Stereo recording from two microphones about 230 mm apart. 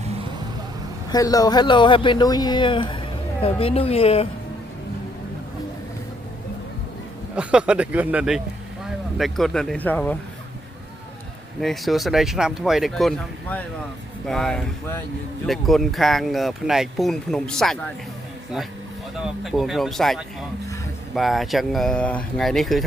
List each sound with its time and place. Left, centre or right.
1.1 s speech: centre
7.3 s speech: centre
11.6 s speech: centre
19.2 s speech: centre